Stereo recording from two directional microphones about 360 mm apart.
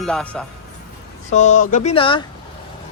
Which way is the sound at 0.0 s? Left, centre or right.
Centre.